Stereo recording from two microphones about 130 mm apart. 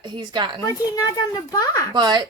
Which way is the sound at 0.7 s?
25° left (ahead or behind).